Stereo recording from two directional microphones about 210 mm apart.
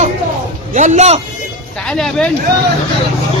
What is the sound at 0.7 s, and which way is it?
Speech, 35° right (ahead or behind).